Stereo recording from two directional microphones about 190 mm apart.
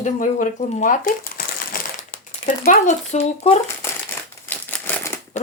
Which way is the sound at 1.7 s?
50° left (ahead or behind).